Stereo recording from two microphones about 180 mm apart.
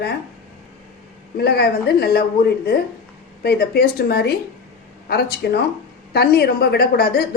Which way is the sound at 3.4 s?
60° left (ahead or behind).